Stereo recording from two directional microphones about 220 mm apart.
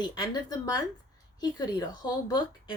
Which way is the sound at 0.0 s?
20° left (ahead or behind).